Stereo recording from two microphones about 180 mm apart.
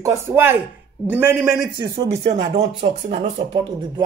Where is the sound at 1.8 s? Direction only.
35° right (ahead or behind).